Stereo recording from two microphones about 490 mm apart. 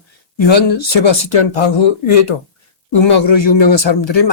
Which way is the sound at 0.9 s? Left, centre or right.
Left.